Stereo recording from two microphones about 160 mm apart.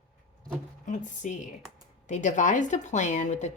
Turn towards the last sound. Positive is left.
turn(degrees=45)  # may be behind; listen again after turning